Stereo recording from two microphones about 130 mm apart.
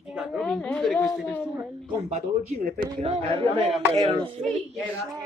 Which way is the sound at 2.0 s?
80° right.